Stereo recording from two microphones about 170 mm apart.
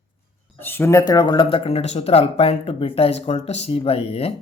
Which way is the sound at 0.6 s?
15° left (ahead or behind).